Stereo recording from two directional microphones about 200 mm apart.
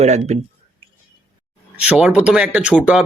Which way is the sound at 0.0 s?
35° right (ahead or behind).